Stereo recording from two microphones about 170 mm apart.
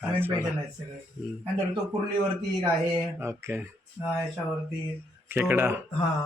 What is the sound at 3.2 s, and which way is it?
Speech, 15° right (ahead or behind).